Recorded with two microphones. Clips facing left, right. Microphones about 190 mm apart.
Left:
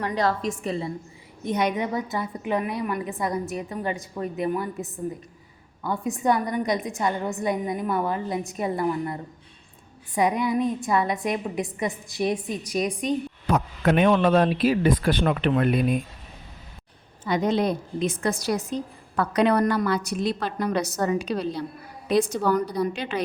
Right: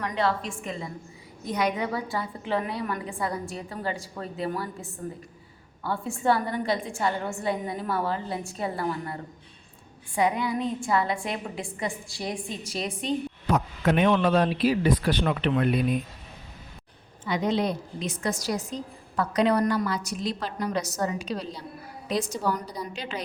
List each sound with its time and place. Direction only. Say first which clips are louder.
0.0 s a woman's voice: left 3 dB; 35° left (ahead or behind)
1.5 s a woman's voice: left 2 dB; 25° left (ahead or behind)
10.2 s a woman's voice: left 3 dB; 20° left (ahead or behind)
13.0 s a woman's voice: left 1 dB; 30° right (ahead or behind)
13.8 s speech: left 3 dB; 55° left (ahead or behind)
17.2 s a woman's voice: left 3 dB; 45° left (ahead or behind); by 23.2 s 60° left (ahead or behind)